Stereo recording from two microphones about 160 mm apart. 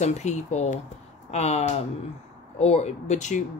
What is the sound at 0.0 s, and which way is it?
Speech, 45° left (ahead or behind).